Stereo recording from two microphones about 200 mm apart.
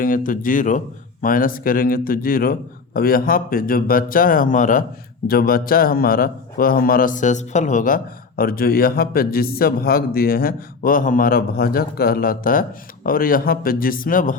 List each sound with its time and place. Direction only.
0.0 s a man's voice: 45° left (ahead or behind)